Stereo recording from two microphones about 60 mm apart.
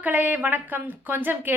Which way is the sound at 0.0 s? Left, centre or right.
Right.